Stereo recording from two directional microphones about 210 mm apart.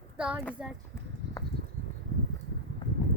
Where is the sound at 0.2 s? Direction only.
5° right (ahead or behind).